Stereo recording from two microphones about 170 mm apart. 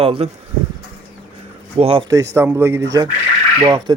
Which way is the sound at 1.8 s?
35° right (ahead or behind).